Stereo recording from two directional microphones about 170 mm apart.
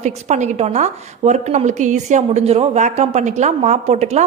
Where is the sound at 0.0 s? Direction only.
45° right (ahead or behind).